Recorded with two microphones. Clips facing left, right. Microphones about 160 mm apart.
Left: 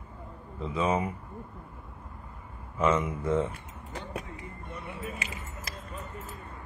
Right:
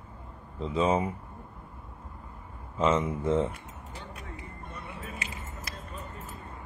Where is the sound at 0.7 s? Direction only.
25° right (ahead or behind).